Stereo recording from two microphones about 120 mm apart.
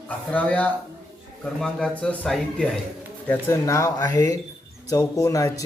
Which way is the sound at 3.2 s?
20° left (ahead or behind).